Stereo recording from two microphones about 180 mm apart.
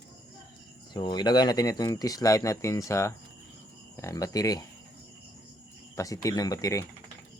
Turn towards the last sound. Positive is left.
turn(degrees=20)  # may be behind; listen again after turning